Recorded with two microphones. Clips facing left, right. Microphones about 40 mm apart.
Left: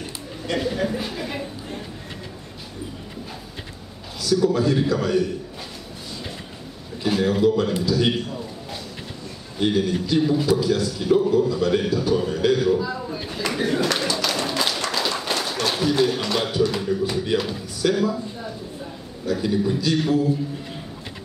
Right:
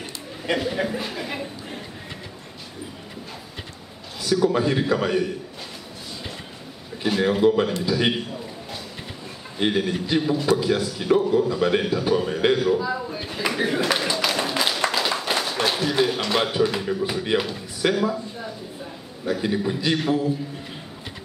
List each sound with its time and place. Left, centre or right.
0.5 s speech: centre
4.2 s speech: right
7.2 s speech: right
9.6 s speech: right
12.5 s a sound: centre
15.7 s speech: centre
19.4 s speech: right